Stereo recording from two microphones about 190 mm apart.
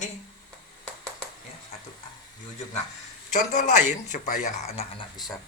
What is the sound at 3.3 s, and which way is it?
A man's voice, 40° left (ahead or behind).